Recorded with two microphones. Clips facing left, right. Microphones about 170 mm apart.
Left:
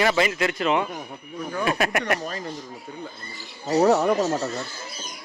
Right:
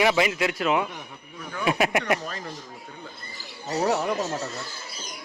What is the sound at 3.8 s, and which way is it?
Speech, 35° left (ahead or behind).